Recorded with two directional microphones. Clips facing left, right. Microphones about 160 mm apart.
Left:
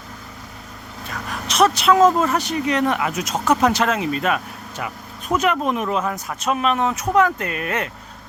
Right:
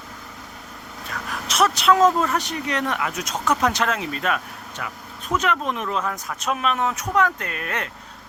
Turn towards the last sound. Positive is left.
turn(degrees=5)  # may be behind; listen again after turning